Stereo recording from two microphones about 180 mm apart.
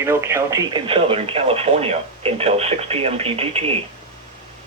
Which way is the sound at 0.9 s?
30° right (ahead or behind).